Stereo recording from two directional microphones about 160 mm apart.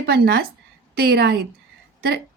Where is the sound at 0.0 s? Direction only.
75° right (ahead or behind).